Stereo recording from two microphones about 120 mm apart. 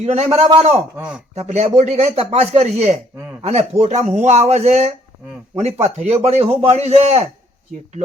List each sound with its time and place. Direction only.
0.0 s speech: 60° right (ahead or behind)
0.9 s speech: 10° right (ahead or behind)
1.4 s speech: 70° right (ahead or behind)